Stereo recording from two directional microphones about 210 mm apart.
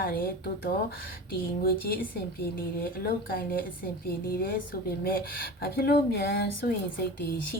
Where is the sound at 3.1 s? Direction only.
45° left (ahead or behind).